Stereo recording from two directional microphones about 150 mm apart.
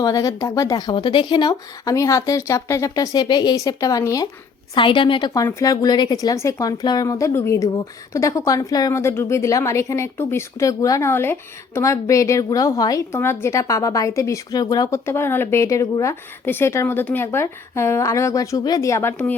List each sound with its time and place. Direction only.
0.0 s a woman's voice: 25° left (ahead or behind)
4.7 s a woman's voice: 35° left (ahead or behind); by 19.3 s 15° left (ahead or behind)